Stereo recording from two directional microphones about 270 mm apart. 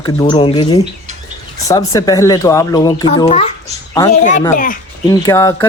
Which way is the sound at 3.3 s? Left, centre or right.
Left.